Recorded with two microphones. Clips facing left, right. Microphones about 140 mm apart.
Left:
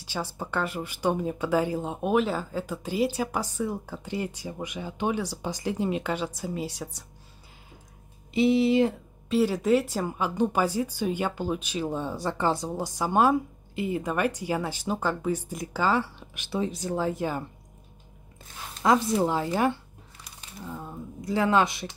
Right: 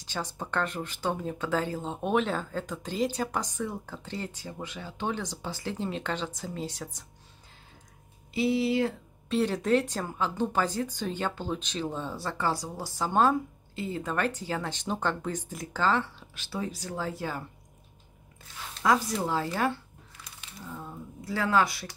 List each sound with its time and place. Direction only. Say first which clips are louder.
0.0 s a sound: left 2 dB; 10° left (ahead or behind)
0.4 s speech: left 1 dB; 10° left (ahead or behind)
8.3 s speech: left 5 dB; 20° left (ahead or behind)
9.3 s speech: left 3 dB; 5° left (ahead or behind); by 17.5 s 20° left (ahead or behind)
18.9 s speech: left 4 dB; 25° left (ahead or behind)